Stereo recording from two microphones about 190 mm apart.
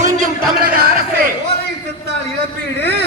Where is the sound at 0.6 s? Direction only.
55° right (ahead or behind).